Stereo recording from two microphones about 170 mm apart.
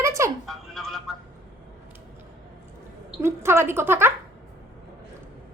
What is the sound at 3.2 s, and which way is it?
Speech, 15° right (ahead or behind).